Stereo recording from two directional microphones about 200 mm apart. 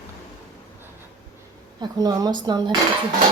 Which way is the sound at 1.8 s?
20° right (ahead or behind).